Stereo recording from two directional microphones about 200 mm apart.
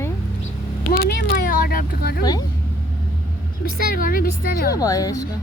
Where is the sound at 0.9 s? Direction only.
45° left (ahead or behind).